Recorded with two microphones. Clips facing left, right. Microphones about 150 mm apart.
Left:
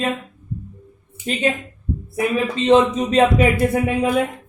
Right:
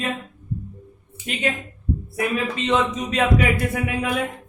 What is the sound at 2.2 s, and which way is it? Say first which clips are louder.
Speech: left 5 dB; 30° left (ahead or behind).